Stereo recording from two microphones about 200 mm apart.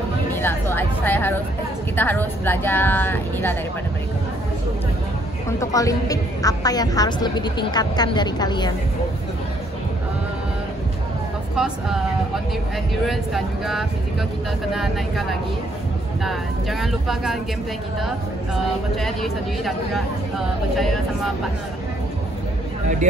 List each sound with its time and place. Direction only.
0.3 s speech: 10° left (ahead or behind)
5.6 s a woman's voice: 15° left (ahead or behind)
11.5 s speech: centre (ahead or behind)
13.0 s speech: centre (ahead or behind)